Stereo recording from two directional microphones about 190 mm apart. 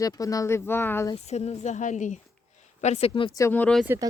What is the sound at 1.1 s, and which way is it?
Speech, 35° left (ahead or behind).